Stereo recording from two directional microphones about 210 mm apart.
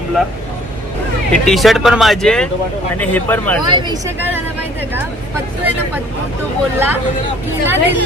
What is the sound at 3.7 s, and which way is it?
Speech, 20° right (ahead or behind).